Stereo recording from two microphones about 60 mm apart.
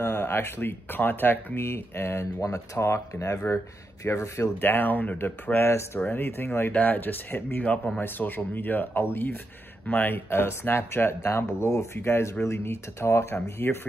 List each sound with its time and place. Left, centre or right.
0.0 s speech: left
2.4 s speech: left
13.6 s speech: left